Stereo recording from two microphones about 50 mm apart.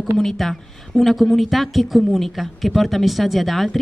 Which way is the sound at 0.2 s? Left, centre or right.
Centre.